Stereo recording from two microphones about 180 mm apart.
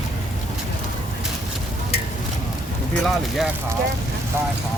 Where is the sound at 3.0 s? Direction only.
Centre (ahead or behind).